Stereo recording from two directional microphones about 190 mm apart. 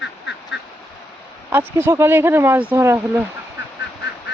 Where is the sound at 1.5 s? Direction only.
10° right (ahead or behind).